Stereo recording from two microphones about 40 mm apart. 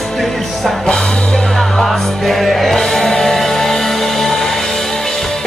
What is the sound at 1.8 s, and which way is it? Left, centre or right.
Music, centre.